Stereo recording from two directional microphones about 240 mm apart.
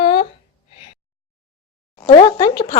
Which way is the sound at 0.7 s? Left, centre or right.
Left.